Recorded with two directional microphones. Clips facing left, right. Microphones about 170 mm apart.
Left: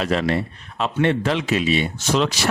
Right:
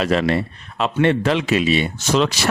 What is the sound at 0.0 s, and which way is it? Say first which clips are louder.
Speech: right 3 dB; 85° right.